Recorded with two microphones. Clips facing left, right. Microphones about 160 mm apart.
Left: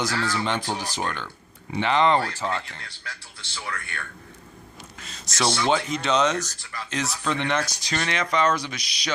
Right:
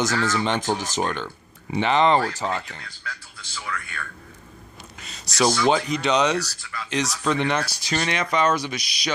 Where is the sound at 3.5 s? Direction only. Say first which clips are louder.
Right 1 dB; 30° left (ahead or behind).